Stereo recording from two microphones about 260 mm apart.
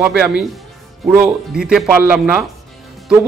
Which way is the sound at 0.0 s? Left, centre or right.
Centre.